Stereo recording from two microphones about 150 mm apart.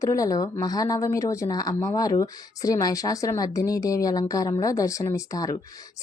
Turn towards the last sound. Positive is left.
turn(degrees=20)  # may be behind; listen again after turning